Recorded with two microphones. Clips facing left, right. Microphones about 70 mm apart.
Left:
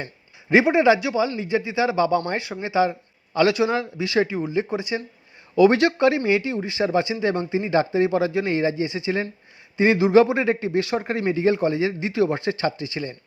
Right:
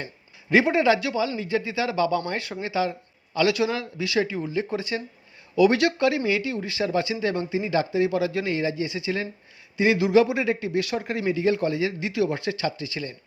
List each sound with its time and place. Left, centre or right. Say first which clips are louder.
0.5 s speech: left 3 dB; left
5.5 s speech: left 3 dB; left